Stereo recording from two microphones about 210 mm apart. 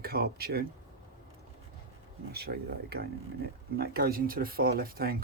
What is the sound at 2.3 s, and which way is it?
Speech, 50° right (ahead or behind).